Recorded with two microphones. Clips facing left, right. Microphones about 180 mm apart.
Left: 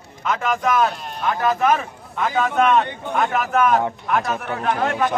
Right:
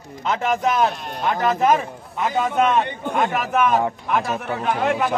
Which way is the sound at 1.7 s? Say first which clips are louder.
Right 1 dB; 10° right (ahead or behind).